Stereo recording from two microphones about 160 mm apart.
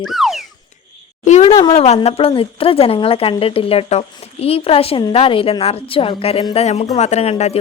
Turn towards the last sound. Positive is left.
turn(degrees=40)  # may be behind; listen again after turning